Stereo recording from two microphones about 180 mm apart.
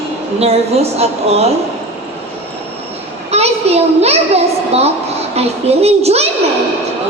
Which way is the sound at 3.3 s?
35° right (ahead or behind).